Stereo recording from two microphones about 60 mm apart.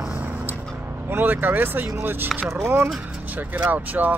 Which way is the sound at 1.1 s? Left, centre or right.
Right.